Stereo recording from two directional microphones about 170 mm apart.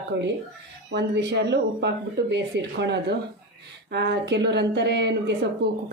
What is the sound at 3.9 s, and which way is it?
A woman's voice, 80° right.